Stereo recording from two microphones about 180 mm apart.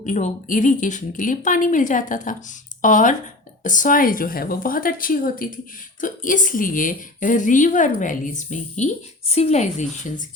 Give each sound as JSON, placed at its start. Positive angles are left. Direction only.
{"t": 0.0, "sound": "speech", "side_deg": 45}